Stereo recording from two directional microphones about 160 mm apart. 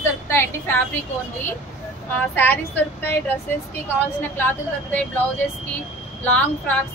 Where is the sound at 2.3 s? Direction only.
15° left (ahead or behind).